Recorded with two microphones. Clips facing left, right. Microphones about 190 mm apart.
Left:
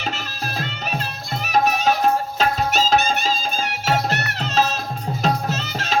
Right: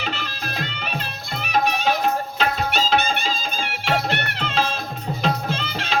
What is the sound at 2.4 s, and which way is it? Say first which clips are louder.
Music: left 1 dB; 40° left (ahead or behind).